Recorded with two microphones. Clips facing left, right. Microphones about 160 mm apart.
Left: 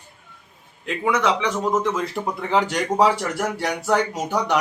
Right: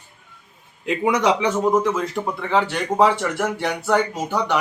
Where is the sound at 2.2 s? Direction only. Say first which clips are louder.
Even; 15° left (ahead or behind).